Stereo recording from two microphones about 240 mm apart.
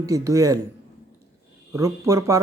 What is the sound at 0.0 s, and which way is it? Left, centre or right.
Speech, centre.